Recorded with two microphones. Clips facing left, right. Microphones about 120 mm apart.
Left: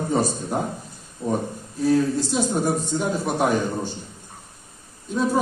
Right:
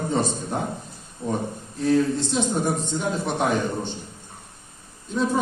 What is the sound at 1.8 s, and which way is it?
A man's voice, 5° left (ahead or behind).